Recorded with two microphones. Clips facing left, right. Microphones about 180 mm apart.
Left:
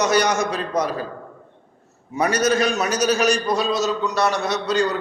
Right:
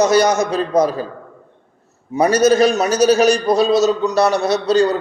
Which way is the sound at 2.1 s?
35° right (ahead or behind).